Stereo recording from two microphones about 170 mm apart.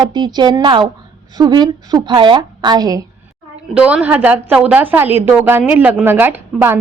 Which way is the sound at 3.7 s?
5° right (ahead or behind).